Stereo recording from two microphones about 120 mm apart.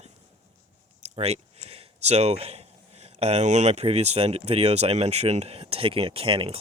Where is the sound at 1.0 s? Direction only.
60° right (ahead or behind).